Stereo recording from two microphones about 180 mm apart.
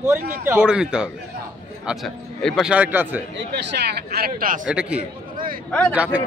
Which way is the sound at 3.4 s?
70° right (ahead or behind).